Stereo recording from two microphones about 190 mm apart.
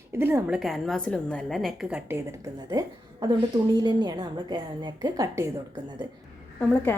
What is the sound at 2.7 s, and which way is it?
A woman's voice, 20° right (ahead or behind).